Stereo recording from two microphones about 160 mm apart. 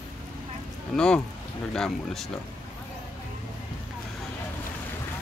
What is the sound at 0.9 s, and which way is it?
Speech, 5° left (ahead or behind).